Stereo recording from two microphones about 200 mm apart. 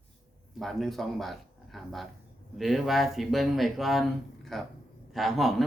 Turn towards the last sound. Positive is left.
turn(degrees=0)  # may be behind; listen again after turning